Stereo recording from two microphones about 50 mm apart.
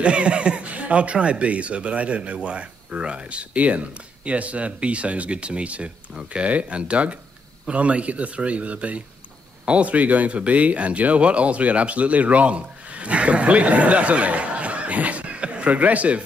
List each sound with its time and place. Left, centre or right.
0.0 s speech: right